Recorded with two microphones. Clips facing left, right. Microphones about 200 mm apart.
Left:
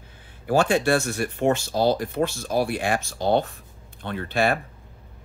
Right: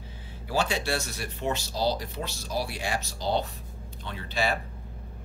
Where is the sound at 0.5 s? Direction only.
50° left (ahead or behind).